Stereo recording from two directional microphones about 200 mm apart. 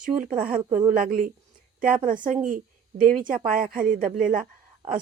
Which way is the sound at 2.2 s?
40° right (ahead or behind).